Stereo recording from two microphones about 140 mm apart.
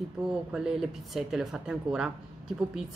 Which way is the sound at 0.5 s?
5° right (ahead or behind).